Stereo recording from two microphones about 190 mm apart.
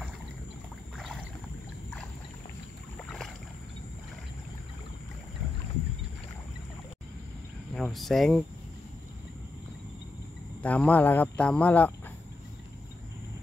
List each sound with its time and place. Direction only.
0.9 s boat: centre (ahead or behind)
7.7 s speech: centre (ahead or behind)
10.6 s speech: 5° left (ahead or behind)